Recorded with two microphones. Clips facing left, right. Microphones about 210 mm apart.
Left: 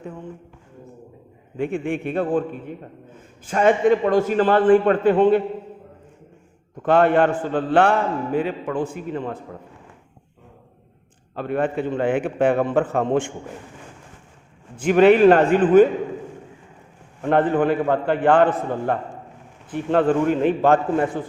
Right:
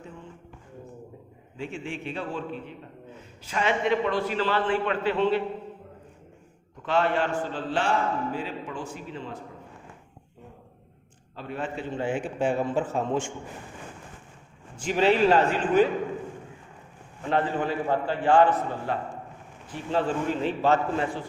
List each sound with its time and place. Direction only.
1.5 s a man's voice: 55° left (ahead or behind)
6.8 s a man's voice: 55° left (ahead or behind)
11.3 s a man's voice: 60° left (ahead or behind)
14.8 s a man's voice: 55° left (ahead or behind)
17.2 s a man's voice: 55° left (ahead or behind)